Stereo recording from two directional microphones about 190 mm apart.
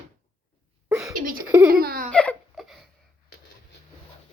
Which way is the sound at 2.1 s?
Centre (ahead or behind).